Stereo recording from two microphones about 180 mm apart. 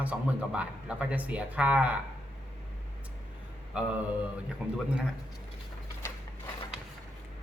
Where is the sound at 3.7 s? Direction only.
5° right (ahead or behind).